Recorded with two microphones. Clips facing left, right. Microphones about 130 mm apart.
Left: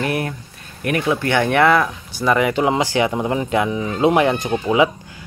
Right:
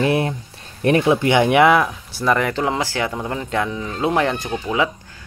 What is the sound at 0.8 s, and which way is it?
Speech, 25° right (ahead or behind).